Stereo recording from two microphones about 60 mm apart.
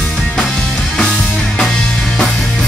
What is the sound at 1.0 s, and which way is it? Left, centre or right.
Music, centre.